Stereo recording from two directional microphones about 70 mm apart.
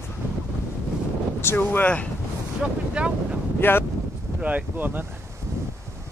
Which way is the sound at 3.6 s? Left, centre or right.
Left.